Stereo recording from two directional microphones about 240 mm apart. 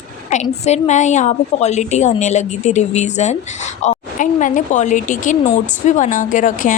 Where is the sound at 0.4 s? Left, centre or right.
Left.